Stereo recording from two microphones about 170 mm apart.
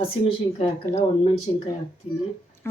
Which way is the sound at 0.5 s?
35° left (ahead or behind).